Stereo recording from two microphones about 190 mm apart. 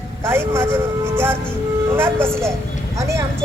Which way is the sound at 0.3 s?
10° right (ahead or behind).